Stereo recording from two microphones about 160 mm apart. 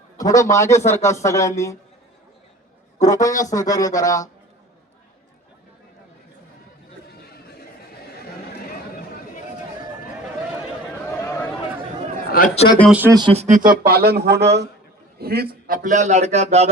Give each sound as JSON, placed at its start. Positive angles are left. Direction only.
{"t": 0.2, "sound": "speech", "side_deg": 20}
{"t": 3.0, "sound": "speech", "side_deg": 20}
{"t": 11.0, "sound": "a sound", "side_deg": 20}
{"t": 12.4, "sound": "a man's voice", "side_deg": 65}
{"t": 13.1, "sound": "speech", "side_deg": -25}
{"t": 13.3, "sound": "speech", "side_deg": -40}
{"t": 13.6, "sound": "speech", "side_deg": -70}
{"t": 15.2, "sound": "a man's voice", "side_deg": -75}